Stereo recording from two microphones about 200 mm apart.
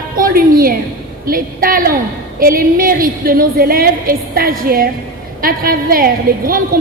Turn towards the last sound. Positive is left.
turn(degrees=-45)  # may be behind; listen again after turning